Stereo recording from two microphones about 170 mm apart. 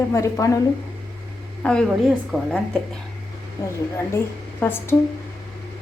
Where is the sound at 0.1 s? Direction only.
20° left (ahead or behind).